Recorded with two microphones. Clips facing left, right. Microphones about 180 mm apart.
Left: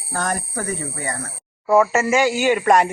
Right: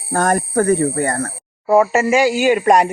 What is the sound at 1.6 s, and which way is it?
A man's voice, 25° right (ahead or behind).